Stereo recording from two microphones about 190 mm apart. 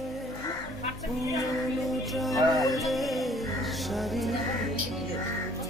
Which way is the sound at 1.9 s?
Centre (ahead or behind).